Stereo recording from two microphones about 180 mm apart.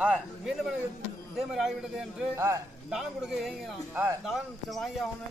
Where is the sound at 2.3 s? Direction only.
15° right (ahead or behind).